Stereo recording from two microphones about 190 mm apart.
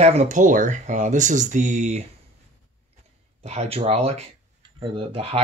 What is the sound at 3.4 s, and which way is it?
Speech, 35° right (ahead or behind).